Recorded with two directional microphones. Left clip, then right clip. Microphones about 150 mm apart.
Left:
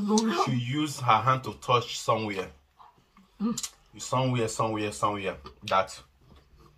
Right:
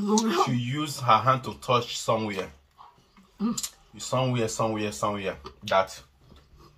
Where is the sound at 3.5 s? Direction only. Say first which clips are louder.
Right 2 dB; 20° left (ahead or behind).